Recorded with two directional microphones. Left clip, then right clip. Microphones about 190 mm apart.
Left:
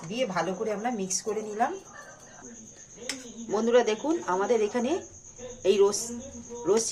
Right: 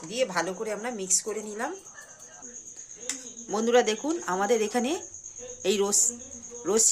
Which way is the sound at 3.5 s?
30° right (ahead or behind).